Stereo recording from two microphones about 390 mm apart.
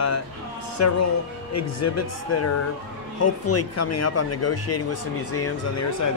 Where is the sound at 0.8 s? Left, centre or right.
Left.